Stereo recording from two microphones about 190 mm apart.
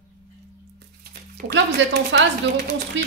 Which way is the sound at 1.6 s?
70° right (ahead or behind).